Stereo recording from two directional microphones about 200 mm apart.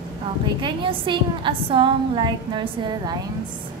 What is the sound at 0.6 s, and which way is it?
A woman's voice, 25° right (ahead or behind).